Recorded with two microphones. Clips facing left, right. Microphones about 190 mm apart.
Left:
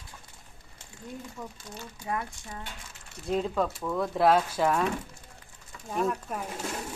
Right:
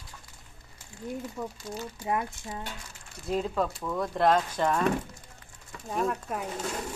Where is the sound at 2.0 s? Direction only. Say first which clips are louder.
Right 3 dB; 20° right (ahead or behind).